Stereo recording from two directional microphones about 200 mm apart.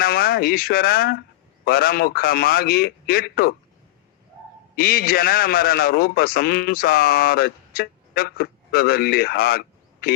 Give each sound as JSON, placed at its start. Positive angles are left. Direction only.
{"t": 0.0, "sound": "a man's voice", "side_deg": 50}
{"t": 4.8, "sound": "a man's voice", "side_deg": 50}